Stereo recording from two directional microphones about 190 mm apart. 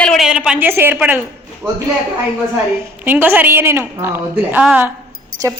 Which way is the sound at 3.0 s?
10° right (ahead or behind).